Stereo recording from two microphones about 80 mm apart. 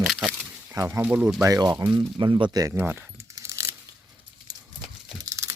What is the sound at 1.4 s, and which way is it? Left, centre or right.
Speech, right.